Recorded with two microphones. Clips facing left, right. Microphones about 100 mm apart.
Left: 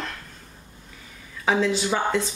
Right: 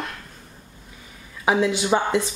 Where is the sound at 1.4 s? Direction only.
15° right (ahead or behind).